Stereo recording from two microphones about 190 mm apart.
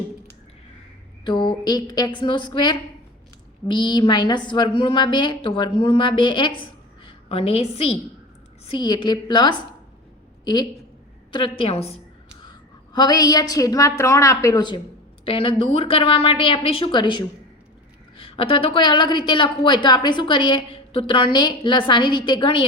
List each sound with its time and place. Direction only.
1.2 s a woman's voice: 25° left (ahead or behind)